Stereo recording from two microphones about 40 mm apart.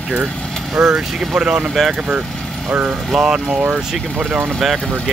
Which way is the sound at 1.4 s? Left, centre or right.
Right.